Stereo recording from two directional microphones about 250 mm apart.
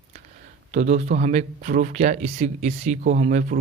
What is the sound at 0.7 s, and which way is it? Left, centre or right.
Speech, right.